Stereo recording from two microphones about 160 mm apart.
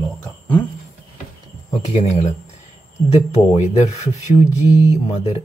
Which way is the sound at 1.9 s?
40° left (ahead or behind).